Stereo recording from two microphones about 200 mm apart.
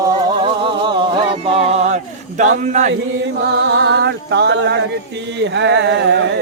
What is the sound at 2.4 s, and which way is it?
Speech, 40° right (ahead or behind).